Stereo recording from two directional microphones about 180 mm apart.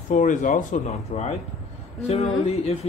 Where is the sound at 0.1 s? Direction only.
45° left (ahead or behind).